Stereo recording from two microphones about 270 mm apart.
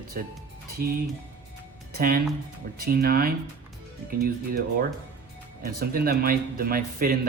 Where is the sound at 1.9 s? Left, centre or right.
Right.